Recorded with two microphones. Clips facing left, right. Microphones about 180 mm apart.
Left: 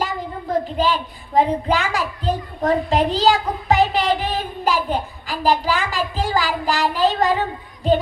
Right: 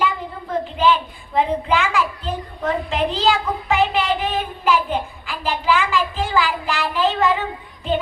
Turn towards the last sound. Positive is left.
turn(degrees=40)  # may be behind; listen again after turning